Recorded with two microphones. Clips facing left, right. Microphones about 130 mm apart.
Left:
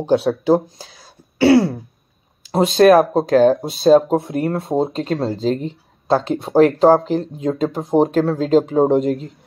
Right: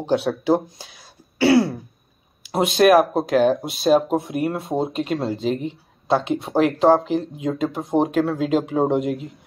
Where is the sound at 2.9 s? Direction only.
5° right (ahead or behind).